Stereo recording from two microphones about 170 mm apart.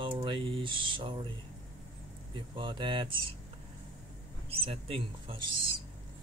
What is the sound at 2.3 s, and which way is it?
Speech, 30° right (ahead or behind).